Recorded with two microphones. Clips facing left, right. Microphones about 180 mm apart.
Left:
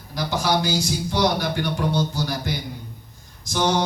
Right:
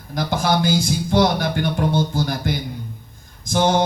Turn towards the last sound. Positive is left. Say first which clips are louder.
# right 4 dB
turn(degrees=-55)  # may be behind; listen again after turning